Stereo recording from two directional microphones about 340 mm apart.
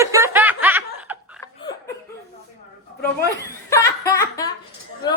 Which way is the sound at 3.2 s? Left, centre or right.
Centre.